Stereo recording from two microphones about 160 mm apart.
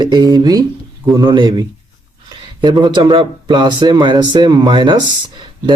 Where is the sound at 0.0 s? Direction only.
25° right (ahead or behind).